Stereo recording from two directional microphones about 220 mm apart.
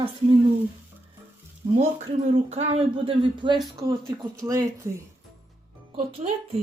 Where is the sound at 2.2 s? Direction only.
30° right (ahead or behind); by 4.9 s 15° right (ahead or behind).